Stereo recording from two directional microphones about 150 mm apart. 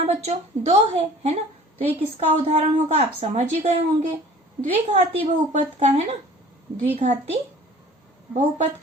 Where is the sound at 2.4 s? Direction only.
45° right (ahead or behind).